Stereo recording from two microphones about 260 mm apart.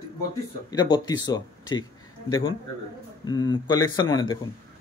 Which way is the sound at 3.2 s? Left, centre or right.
Centre.